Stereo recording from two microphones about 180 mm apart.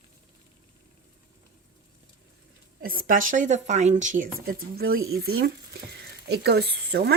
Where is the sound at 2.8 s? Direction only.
50° right (ahead or behind).